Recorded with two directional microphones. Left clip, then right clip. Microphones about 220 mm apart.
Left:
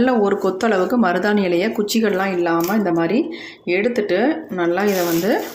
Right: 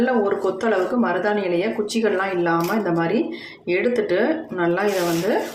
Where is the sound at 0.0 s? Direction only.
40° left (ahead or behind).